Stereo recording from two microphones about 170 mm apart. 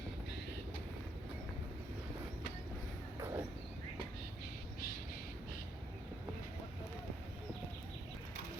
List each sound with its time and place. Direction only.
3.2 s vehicle: 15° right (ahead or behind)